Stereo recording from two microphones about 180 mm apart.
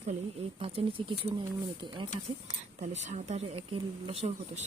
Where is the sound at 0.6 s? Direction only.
30° right (ahead or behind).